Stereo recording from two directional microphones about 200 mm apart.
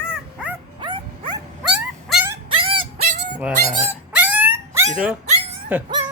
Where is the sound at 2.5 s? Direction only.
25° right (ahead or behind).